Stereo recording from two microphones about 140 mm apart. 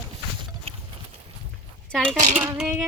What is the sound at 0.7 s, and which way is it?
Clip-clop, 45° right (ahead or behind).